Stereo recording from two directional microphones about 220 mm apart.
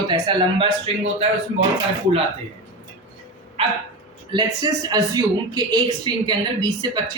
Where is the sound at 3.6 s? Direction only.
25° right (ahead or behind).